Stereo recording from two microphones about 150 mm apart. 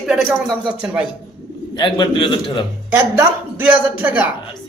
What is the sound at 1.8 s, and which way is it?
Speech, 35° left (ahead or behind).